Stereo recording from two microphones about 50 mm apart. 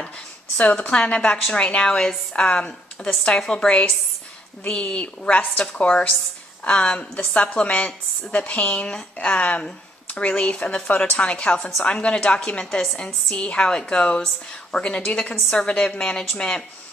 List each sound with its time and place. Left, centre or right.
0.6 s a woman's voice: left
2.4 s a woman's voice: left
5.6 s a woman's voice: centre